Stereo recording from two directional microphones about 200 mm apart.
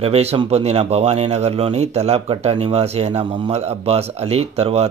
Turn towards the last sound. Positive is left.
turn(degrees=-30)  # may be behind; listen again after turning